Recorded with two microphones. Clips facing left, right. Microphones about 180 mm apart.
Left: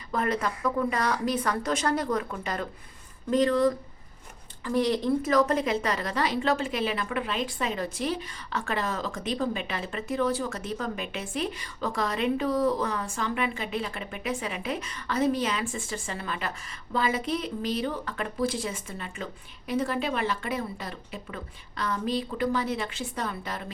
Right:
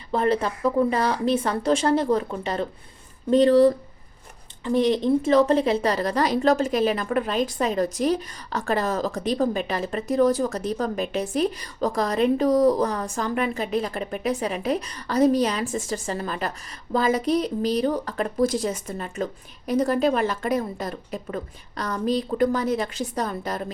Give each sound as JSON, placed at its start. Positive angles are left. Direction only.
{"t": 0.1, "sound": "speech", "side_deg": -30}